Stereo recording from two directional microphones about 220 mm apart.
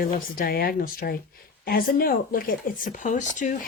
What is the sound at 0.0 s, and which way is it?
Speech, 40° left (ahead or behind).